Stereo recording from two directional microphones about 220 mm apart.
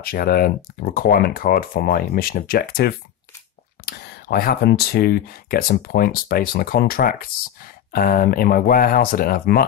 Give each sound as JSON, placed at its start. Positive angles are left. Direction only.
{"t": 0.0, "sound": "speech", "side_deg": 40}